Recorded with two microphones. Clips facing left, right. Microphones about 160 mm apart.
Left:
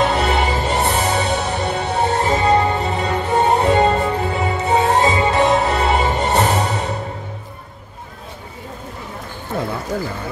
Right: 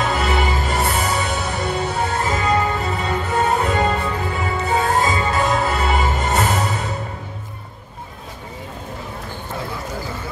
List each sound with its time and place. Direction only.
0.1 s music: 30° left (ahead or behind)
9.5 s run: 60° left (ahead or behind)